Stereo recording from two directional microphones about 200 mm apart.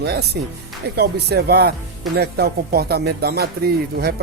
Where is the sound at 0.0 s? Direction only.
55° right (ahead or behind).